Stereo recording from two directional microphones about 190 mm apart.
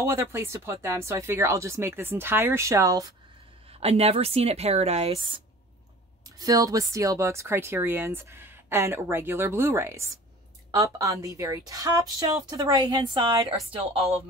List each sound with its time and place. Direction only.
0.0 s speech: 15° right (ahead or behind)
3.8 s a woman's voice: 30° right (ahead or behind)
13.7 s speech: 30° right (ahead or behind)